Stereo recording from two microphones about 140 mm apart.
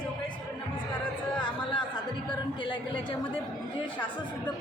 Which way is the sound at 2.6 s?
35° left (ahead or behind).